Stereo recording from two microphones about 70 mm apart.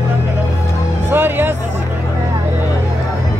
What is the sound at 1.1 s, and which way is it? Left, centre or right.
Music, right.